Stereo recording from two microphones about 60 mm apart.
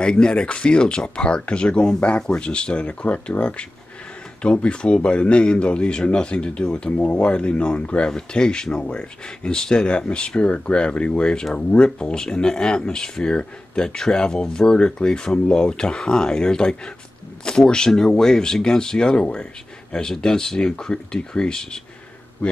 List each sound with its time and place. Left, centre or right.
0.0 s speech: centre